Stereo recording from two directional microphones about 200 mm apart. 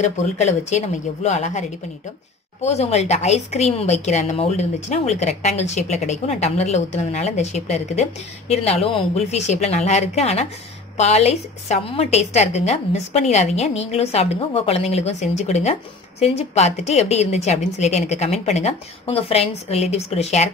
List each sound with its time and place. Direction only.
0.0 s a woman's voice: 35° left (ahead or behind)